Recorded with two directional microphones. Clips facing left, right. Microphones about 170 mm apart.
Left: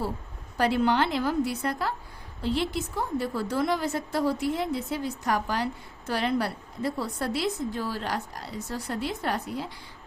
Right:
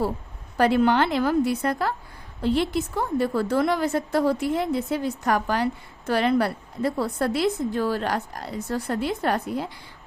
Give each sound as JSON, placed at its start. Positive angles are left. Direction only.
{"t": 0.5, "sound": "a woman's voice", "side_deg": -55}